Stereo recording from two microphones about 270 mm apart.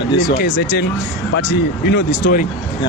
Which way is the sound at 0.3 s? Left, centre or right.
Left.